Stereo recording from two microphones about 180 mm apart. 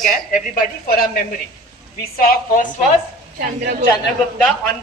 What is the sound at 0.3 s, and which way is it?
A woman's voice, 55° left (ahead or behind).